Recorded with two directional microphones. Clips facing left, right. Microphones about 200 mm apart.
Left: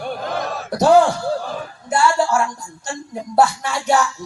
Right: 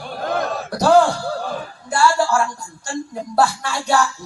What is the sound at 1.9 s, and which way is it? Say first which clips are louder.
A woman's voice: even; 20° left (ahead or behind).